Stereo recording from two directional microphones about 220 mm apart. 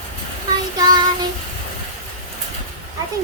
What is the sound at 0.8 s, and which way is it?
Child singing, 20° right (ahead or behind).